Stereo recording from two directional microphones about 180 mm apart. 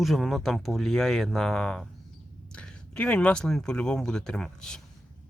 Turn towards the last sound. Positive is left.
turn(degrees=5)  # may be behind; listen again after turning